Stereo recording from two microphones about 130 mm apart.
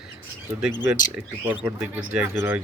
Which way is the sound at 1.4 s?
10° right (ahead or behind).